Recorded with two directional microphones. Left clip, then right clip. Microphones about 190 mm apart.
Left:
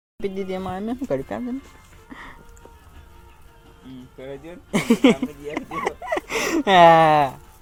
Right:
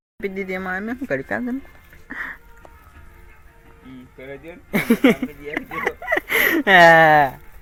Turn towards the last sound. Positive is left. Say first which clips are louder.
# right 3 dB
turn(degrees=-5)  # may be behind; listen again after turning